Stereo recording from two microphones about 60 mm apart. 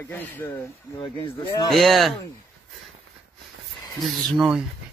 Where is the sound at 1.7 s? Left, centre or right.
Centre.